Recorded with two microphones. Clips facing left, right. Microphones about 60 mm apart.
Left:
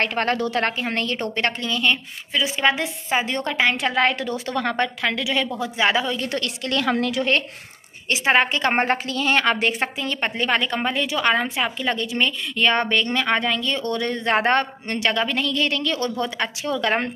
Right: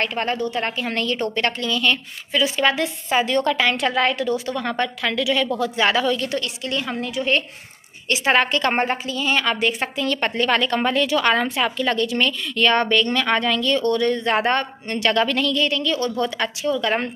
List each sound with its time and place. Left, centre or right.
0.0 s a woman's voice: left
0.4 s a woman's voice: left
0.7 s a woman's voice: left
4.0 s a woman's voice: left
5.6 s speech: centre
6.1 s a woman's voice: left
6.4 s a woman's voice: left
6.8 s a woman's voice: left
8.1 s a woman's voice: left
8.8 s a woman's voice: left
9.9 s a woman's voice: centre; by 16.1 s left
16.2 s a woman's voice: left
16.6 s a woman's voice: left